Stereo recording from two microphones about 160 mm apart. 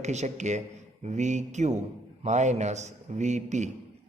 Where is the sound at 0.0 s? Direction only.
45° right (ahead or behind).